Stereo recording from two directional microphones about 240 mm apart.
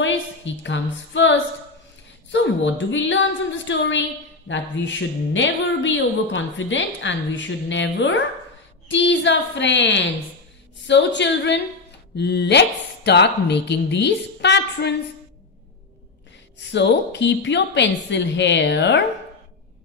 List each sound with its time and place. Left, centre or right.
0.7 s female singing: left
2.3 s speech: left
16.7 s speech: left